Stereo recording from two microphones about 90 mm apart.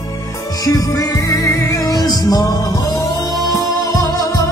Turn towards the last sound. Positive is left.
turn(degrees=40)  # may be behind; listen again after turning